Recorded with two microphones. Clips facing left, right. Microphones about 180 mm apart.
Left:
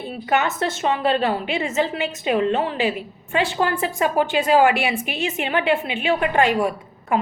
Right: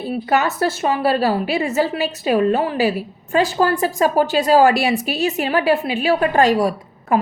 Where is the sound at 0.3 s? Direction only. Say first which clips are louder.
Right 2 dB; 35° right (ahead or behind).